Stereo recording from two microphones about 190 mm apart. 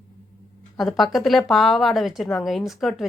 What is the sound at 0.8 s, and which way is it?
A woman's voice, centre (ahead or behind).